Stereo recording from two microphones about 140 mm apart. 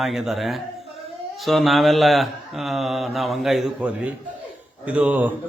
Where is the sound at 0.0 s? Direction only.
Centre (ahead or behind).